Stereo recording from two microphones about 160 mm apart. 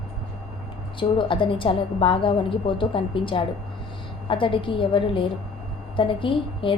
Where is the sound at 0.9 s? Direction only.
30° left (ahead or behind).